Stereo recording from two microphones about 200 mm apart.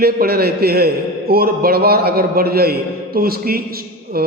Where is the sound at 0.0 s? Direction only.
50° right (ahead or behind).